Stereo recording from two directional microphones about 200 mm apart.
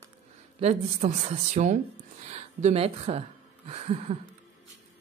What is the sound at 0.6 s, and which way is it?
Speech, 35° right (ahead or behind).